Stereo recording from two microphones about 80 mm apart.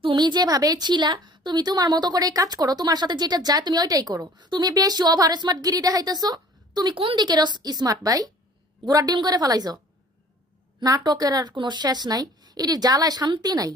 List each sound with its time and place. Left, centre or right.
0.0 s a woman's voice: right
4.7 s a woman's voice: right
10.8 s a woman's voice: right
11.5 s a woman's voice: right